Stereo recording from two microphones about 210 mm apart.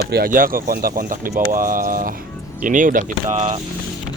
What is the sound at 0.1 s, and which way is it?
Speech, 45° right (ahead or behind).